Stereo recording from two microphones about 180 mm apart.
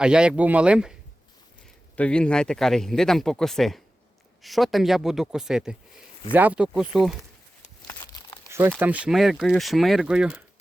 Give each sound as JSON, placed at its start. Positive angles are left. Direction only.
{"t": 0.0, "sound": "speech", "side_deg": -5}
{"t": 2.0, "sound": "speech", "side_deg": 5}
{"t": 7.9, "sound": "crumpling", "side_deg": 20}
{"t": 8.4, "sound": "crumpling", "side_deg": -15}
{"t": 8.8, "sound": "speech", "side_deg": -5}